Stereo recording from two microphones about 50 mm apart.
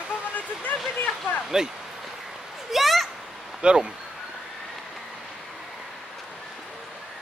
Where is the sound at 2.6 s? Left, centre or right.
Centre.